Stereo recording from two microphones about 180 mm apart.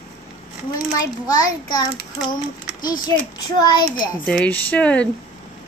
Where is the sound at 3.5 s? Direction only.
25° left (ahead or behind).